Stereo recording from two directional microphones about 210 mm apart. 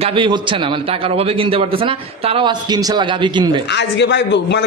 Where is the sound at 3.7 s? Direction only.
55° left (ahead or behind).